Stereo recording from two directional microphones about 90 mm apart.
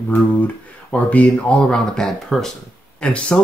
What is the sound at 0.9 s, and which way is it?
Speech, 15° left (ahead or behind).